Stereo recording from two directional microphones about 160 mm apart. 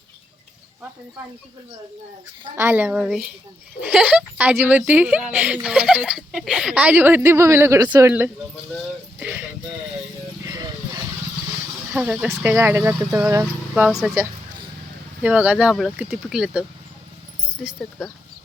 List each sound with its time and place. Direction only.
2.6 s speech: 15° right (ahead or behind)
10.4 s a sound: 20° right (ahead or behind)
11.9 s speech: 5° right (ahead or behind)
15.2 s speech: 10° right (ahead or behind)